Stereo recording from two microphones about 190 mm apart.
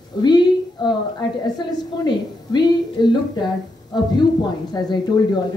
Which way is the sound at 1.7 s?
25° left (ahead or behind).